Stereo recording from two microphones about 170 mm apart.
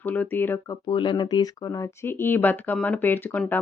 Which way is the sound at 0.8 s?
25° left (ahead or behind).